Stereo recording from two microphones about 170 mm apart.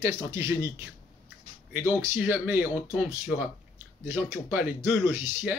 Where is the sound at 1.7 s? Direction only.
10° right (ahead or behind).